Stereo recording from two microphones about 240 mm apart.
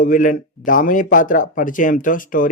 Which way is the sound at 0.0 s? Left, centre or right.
Left.